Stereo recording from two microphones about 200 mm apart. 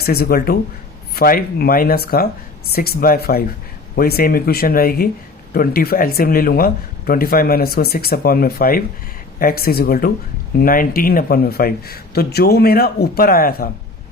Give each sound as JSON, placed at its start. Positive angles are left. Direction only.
{"t": 0.0, "sound": "a man's voice", "side_deg": 50}